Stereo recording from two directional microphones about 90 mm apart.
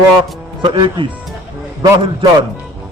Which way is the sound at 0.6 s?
60° right (ahead or behind).